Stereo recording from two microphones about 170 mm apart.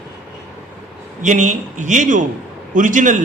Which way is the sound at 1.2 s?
45° right (ahead or behind).